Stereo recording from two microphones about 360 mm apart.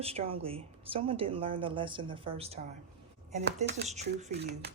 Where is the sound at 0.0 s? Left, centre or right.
Centre.